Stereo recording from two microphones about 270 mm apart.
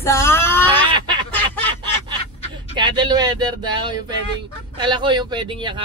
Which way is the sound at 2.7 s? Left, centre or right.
Centre.